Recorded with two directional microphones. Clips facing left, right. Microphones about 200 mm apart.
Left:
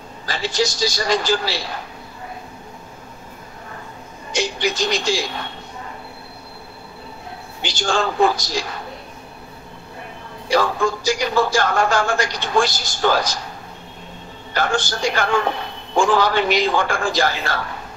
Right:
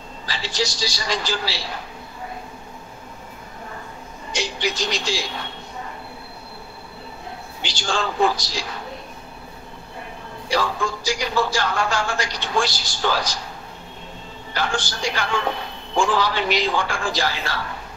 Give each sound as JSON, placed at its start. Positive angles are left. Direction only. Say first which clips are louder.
{"t": 0.3, "sound": "speech", "louder": "left 5 dB", "side_deg": 50}
{"t": 4.4, "sound": "speech", "louder": "left 4 dB", "side_deg": 50}
{"t": 7.6, "sound": "speech", "louder": "left 4 dB", "side_deg": 50}
{"t": 10.5, "sound": "speech", "louder": "left 5 dB", "side_deg": 50}
{"t": 14.5, "sound": "speech", "louder": "left 4 dB", "side_deg": 50}